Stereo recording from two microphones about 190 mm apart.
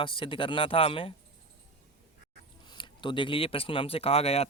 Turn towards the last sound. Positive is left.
turn(degrees=35)  # may be behind; listen again after turning